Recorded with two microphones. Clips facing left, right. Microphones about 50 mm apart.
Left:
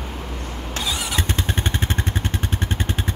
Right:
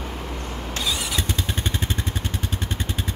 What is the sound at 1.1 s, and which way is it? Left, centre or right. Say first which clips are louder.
Vehicle: left 3 dB; left.